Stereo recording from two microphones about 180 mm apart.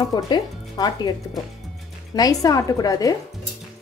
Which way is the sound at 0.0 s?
20° left (ahead or behind).